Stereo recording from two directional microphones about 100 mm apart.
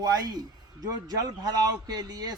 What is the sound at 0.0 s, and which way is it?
Speech, 40° right (ahead or behind).